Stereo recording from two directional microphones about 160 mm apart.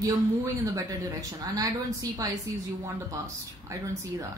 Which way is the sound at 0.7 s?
20° right (ahead or behind).